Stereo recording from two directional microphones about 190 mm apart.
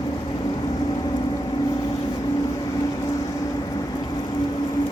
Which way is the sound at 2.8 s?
15° left (ahead or behind).